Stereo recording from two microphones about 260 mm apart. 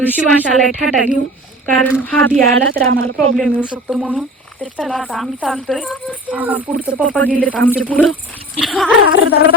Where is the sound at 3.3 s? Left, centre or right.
Centre.